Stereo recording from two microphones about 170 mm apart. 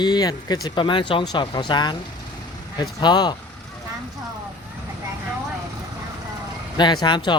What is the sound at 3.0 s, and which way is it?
Speech, 25° left (ahead or behind).